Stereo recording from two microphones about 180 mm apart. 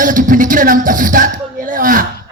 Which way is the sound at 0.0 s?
50° right (ahead or behind).